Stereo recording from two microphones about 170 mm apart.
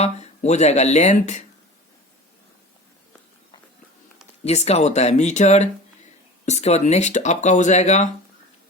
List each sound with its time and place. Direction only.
0.0 s speech: 40° left (ahead or behind)
4.4 s speech: 40° left (ahead or behind)